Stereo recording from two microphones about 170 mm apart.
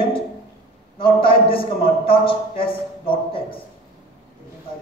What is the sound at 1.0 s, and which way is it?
A man's voice, 60° left (ahead or behind).